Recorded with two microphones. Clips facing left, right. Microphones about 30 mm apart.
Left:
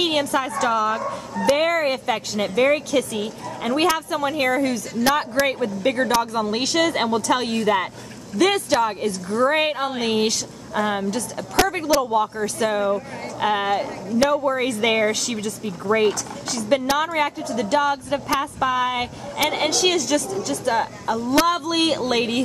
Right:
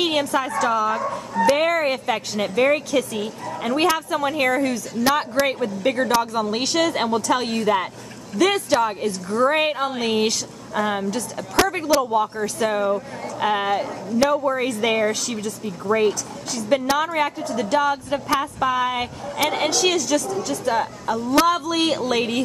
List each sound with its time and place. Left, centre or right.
0.3 s a woman's voice: centre